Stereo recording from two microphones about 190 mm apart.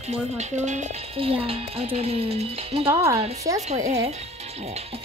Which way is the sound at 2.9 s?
15° right (ahead or behind).